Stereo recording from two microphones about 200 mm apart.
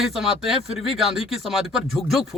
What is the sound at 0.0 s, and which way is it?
A man's voice, centre (ahead or behind).